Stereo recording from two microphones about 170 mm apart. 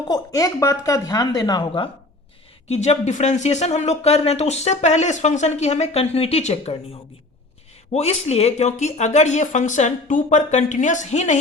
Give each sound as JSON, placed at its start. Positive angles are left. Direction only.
{"t": 0.1, "sound": "speech", "side_deg": 20}
{"t": 2.6, "sound": "speech", "side_deg": 40}
{"t": 7.9, "sound": "speech", "side_deg": 40}